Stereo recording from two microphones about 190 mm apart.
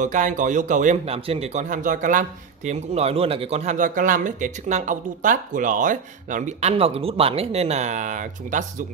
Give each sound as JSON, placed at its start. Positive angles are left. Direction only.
{"t": 0.0, "sound": "speech", "side_deg": -40}